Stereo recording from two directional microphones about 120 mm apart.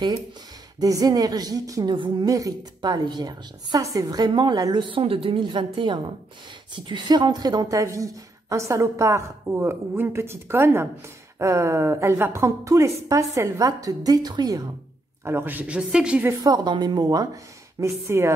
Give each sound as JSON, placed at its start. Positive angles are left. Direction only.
{"t": 0.7, "sound": "a woman's voice", "side_deg": -30}
{"t": 15.2, "sound": "a woman's voice", "side_deg": -15}
{"t": 16.4, "sound": "a woman's voice", "side_deg": -35}